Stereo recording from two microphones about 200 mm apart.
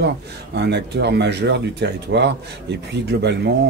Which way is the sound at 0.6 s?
55° right (ahead or behind).